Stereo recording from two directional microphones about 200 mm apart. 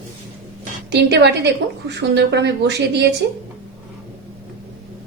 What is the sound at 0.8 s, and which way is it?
A woman's voice, 60° right (ahead or behind).